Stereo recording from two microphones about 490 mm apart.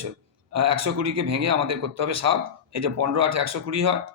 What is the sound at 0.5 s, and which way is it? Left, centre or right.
Speech, right.